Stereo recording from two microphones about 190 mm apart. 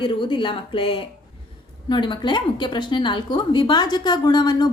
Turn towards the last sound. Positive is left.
turn(degrees=20)  # may be behind; listen again after turning